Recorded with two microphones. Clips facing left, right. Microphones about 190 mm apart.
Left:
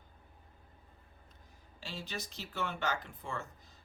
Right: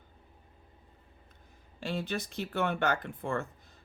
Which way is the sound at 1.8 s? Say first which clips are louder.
Right 9 dB; 55° right (ahead or behind).